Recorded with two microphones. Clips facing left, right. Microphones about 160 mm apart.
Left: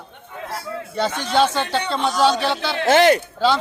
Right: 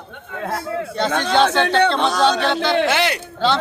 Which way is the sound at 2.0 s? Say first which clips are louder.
Right 2 dB; 75° right (ahead or behind).